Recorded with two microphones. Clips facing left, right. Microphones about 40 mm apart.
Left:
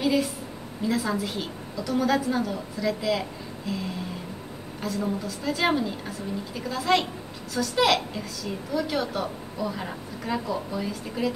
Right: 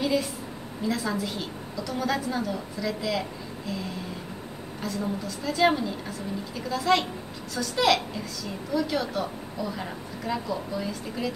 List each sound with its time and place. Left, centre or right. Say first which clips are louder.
0.0 s a sound: left 2 dB; centre
0.8 s a woman's voice: left 2 dB; centre
4.8 s a woman's voice: left 2 dB; centre